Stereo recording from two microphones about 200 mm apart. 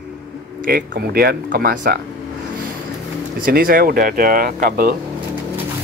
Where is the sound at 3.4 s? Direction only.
45° right (ahead or behind).